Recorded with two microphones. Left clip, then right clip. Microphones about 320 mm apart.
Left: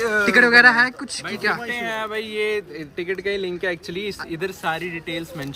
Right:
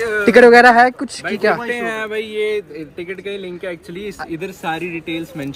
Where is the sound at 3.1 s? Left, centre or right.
Left.